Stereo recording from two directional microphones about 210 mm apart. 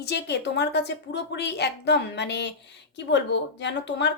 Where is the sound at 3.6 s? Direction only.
55° left (ahead or behind).